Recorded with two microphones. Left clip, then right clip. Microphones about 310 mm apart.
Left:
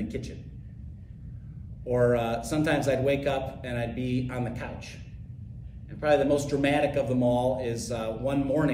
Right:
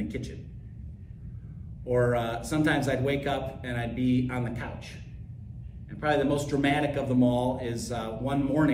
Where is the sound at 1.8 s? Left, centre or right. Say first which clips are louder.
Left 2 dB; centre.